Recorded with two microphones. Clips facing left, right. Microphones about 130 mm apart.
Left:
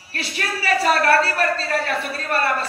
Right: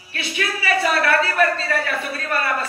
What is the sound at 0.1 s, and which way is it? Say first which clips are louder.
A man's voice: right 1 dB; 40° left (ahead or behind).